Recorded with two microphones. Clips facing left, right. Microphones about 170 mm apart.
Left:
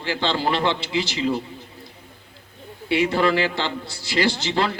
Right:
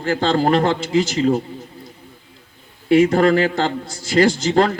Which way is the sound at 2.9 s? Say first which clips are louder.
Right 7 dB; 45° right (ahead or behind).